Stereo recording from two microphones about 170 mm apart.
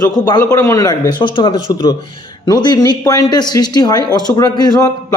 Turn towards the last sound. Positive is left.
turn(degrees=20)  # may be behind; listen again after turning